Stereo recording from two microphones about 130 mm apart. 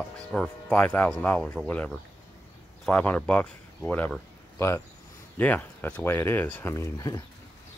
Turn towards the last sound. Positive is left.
turn(degrees=20)  # may be behind; listen again after turning